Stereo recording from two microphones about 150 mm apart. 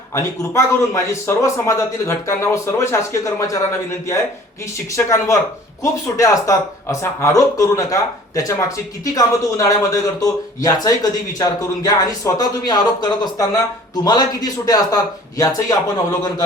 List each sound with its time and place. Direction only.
0.1 s speech: 20° left (ahead or behind)
4.9 s speech: 20° left (ahead or behind)